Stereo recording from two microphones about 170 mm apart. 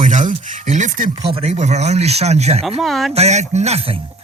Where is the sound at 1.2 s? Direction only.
35° right (ahead or behind).